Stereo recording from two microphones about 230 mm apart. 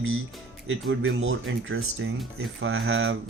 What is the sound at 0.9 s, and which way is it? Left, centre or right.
Speech, right.